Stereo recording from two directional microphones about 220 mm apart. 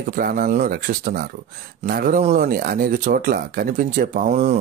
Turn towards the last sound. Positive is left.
turn(degrees=-35)  # may be behind; listen again after turning